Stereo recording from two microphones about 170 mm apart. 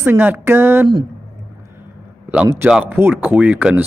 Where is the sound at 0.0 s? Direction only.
10° right (ahead or behind).